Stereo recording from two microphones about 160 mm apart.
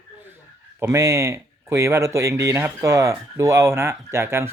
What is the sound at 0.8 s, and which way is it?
Speech, 20° right (ahead or behind).